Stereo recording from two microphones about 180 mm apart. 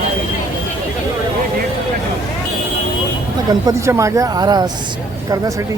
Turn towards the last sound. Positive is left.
turn(degrees=-20)  # may be behind; listen again after turning